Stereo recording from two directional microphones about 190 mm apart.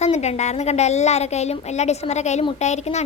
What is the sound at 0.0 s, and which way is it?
A woman's voice, 35° left (ahead or behind).